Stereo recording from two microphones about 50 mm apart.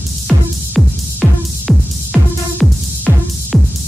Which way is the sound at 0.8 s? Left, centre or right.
Centre.